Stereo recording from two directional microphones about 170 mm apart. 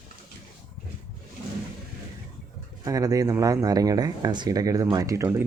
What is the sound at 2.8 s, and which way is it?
Speech, 20° right (ahead or behind).